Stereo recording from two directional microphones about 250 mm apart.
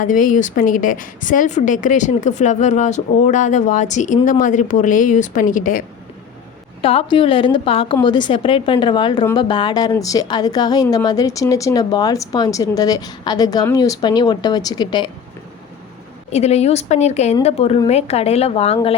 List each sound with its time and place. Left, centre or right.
0.0 s a woman's voice: left
6.8 s a woman's voice: left
16.3 s a woman's voice: left